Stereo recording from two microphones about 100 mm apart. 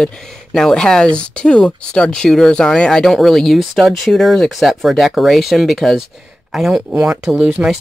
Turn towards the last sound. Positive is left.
turn(degrees=-10)  # may be behind; listen again after turning